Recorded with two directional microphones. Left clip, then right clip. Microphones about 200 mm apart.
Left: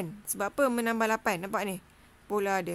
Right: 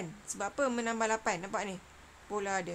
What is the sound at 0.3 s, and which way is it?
Speech, 40° left (ahead or behind).